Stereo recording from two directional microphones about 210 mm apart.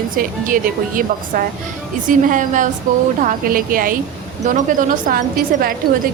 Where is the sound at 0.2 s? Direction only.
40° right (ahead or behind).